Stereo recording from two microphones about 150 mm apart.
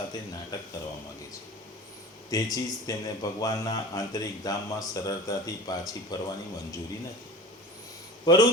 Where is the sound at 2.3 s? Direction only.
25° left (ahead or behind).